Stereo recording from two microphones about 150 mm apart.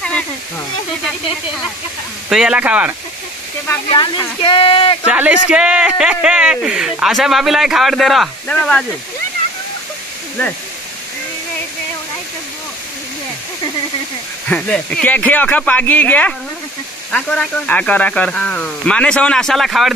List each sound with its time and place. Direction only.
2.2 s speech: 5° right (ahead or behind)
3.9 s speech: 30° left (ahead or behind)
5.0 s speech: 10° right (ahead or behind)
14.5 s speech: 10° left (ahead or behind)